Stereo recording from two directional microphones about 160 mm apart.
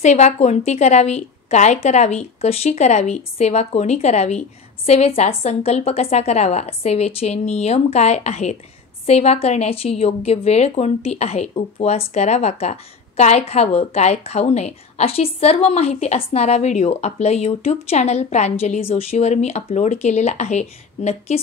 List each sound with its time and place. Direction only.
0.0 s a woman's voice: 45° left (ahead or behind)